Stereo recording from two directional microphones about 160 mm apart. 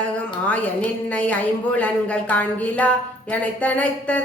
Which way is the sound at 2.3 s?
10° left (ahead or behind).